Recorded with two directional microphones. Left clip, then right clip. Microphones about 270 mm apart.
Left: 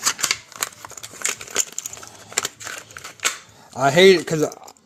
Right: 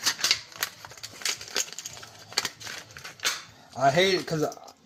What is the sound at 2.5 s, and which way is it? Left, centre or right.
Crumpling, left.